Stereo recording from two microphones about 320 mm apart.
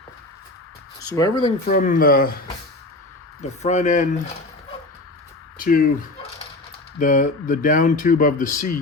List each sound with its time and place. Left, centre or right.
1.1 s speech: centre
1.6 s speech: left
3.6 s speech: left
5.5 s speech: left
7.0 s speech: left